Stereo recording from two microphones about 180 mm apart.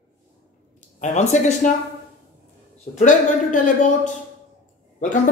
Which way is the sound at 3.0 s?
45° left (ahead or behind).